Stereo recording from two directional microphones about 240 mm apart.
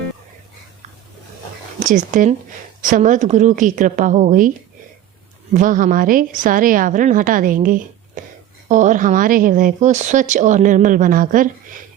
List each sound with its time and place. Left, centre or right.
1.8 s speech: right
5.5 s speech: right